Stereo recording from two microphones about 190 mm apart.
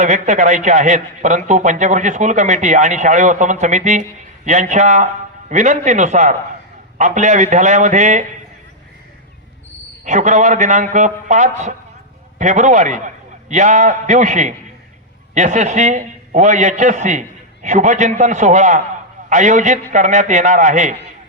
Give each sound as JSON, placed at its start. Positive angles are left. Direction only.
{"t": 0.0, "sound": "a man's voice", "side_deg": -40}
{"t": 10.0, "sound": "a man's voice", "side_deg": -40}